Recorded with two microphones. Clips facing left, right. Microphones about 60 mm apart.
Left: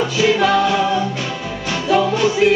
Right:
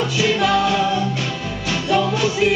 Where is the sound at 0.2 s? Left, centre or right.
Centre.